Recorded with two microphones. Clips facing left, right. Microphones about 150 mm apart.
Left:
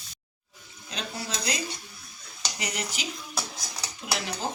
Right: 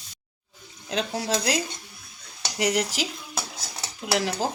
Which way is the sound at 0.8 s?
90° right.